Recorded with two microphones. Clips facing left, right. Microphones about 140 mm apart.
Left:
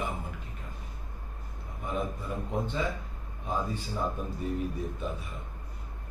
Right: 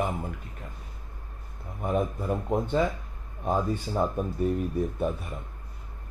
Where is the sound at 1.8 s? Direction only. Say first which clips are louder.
Right 6 dB; 50° right (ahead or behind).